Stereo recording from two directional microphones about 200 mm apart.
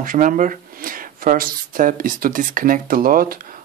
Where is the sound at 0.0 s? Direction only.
40° right (ahead or behind).